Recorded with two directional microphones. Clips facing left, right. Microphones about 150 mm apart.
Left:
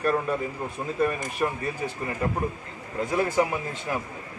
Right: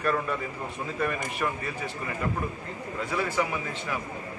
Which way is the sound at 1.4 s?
25° left (ahead or behind).